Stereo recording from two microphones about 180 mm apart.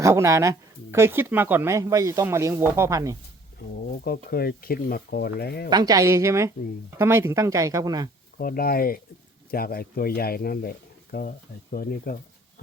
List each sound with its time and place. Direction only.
0.0 s speech: 15° right (ahead or behind)
4.0 s speech: 60° left (ahead or behind)
5.7 s speech: 20° right (ahead or behind)
8.4 s speech: 55° left (ahead or behind)